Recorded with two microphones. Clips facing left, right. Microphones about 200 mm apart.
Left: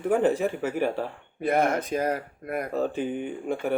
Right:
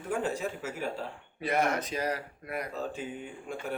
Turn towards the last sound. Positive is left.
turn(degrees=65)  # may be behind; listen again after turning